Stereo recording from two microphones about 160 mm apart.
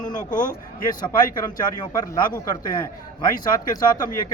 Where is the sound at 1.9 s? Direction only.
20° left (ahead or behind).